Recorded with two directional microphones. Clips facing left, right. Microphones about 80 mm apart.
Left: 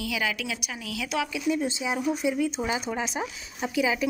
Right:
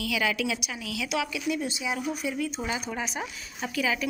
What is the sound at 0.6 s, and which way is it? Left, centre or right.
A woman's voice, left.